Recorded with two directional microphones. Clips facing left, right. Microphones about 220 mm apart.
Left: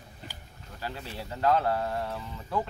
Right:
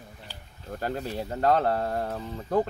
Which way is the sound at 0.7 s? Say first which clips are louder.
Right 7 dB; 50° right (ahead or behind).